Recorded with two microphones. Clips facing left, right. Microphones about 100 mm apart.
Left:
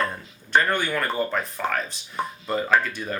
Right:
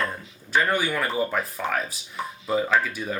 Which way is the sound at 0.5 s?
5° right (ahead or behind).